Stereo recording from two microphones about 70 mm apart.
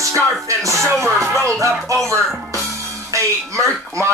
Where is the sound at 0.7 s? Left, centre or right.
Right.